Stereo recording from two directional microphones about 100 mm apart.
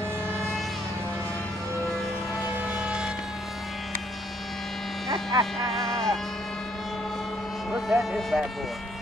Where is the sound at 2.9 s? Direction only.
10° right (ahead or behind).